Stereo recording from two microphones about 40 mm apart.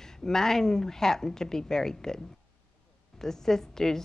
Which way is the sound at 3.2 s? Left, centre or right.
Centre.